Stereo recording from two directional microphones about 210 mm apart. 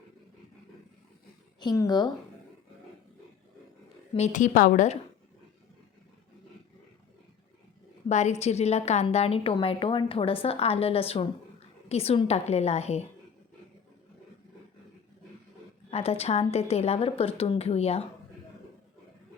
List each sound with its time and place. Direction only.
1.5 s a woman's voice: 15° left (ahead or behind)
4.1 s a woman's voice: 35° left (ahead or behind)
8.0 s a woman's voice: 35° left (ahead or behind)
15.9 s a woman's voice: 30° left (ahead or behind)